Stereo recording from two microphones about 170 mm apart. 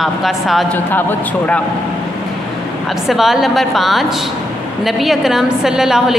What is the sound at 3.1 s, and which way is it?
Speech, centre (ahead or behind).